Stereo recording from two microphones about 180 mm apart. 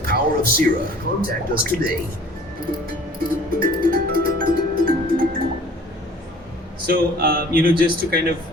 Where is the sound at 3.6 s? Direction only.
55° right (ahead or behind).